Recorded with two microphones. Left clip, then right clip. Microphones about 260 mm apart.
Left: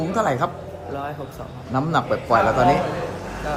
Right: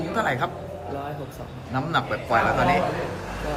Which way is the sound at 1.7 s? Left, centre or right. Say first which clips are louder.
Left 3 dB; centre.